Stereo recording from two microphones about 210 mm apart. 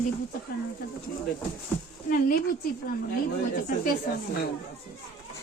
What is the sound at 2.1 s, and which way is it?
Speech, 40° left (ahead or behind).